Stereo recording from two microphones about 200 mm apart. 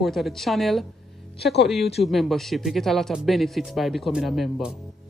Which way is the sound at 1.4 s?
55° left (ahead or behind).